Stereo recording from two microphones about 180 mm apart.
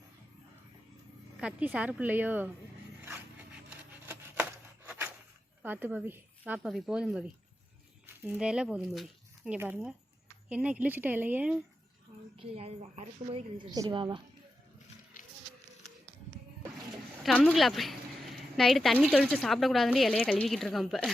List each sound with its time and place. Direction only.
1.4 s speech: 5° right (ahead or behind)
3.0 s a sound: 10° right (ahead or behind)
5.6 s a woman's voice: 10° right (ahead or behind)
12.4 s a woman's voice: 35° right (ahead or behind)
17.2 s a woman's voice: 5° left (ahead or behind)